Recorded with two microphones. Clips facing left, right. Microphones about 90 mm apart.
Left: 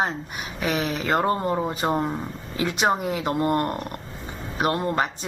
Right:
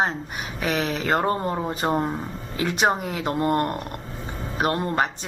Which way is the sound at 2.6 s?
35° right (ahead or behind).